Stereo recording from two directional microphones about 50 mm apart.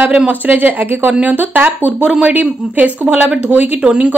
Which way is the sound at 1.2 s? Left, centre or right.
Right.